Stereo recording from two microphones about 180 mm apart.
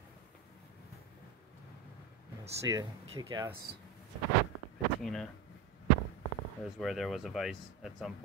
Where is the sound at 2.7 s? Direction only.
20° right (ahead or behind).